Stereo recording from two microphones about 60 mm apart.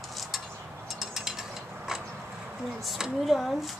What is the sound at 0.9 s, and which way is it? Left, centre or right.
Ratchet, centre.